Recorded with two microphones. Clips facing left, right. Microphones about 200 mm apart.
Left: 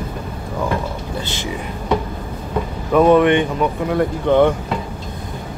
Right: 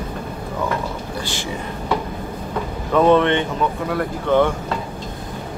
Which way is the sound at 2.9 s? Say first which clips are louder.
Left 3 dB; 10° left (ahead or behind).